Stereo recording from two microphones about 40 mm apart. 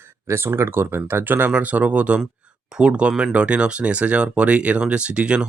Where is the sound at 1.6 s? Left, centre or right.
Right.